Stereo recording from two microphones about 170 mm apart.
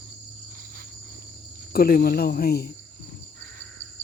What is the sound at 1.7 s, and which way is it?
Cricket, 65° left (ahead or behind).